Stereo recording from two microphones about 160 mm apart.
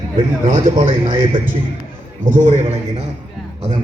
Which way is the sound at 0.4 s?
50° right (ahead or behind).